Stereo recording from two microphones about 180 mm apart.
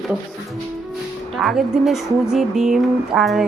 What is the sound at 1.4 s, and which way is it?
A woman's voice, centre (ahead or behind).